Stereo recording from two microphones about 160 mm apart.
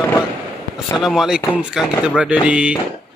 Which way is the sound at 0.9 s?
5° right (ahead or behind).